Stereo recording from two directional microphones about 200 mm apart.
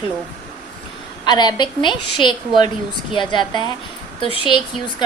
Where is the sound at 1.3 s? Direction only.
20° left (ahead or behind).